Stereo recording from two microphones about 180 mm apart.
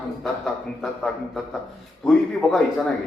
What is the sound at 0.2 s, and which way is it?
A man's voice, centre (ahead or behind).